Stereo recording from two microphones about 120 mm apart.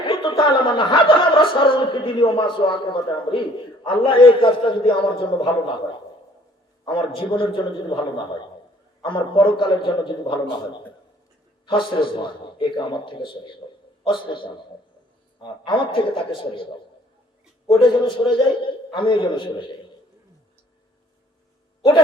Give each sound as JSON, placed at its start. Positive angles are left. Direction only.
{"t": 0.0, "sound": "a man's voice", "side_deg": 45}
{"t": 7.2, "sound": "a man's voice", "side_deg": 45}
{"t": 11.6, "sound": "a man's voice", "side_deg": 45}
{"t": 17.8, "sound": "a man's voice", "side_deg": 45}